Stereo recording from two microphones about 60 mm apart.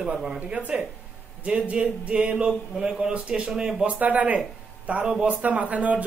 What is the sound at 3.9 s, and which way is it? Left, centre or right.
A man's voice, right.